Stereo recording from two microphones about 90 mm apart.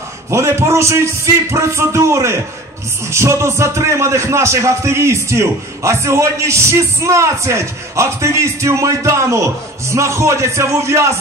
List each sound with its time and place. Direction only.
0.3 s speech: 30° right (ahead or behind)